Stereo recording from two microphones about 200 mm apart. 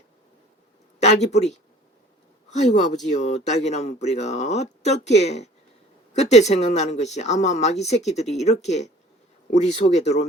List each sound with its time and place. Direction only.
0.9 s speech: 35° left (ahead or behind)